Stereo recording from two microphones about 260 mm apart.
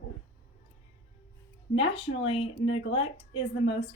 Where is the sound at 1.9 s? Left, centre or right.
Left.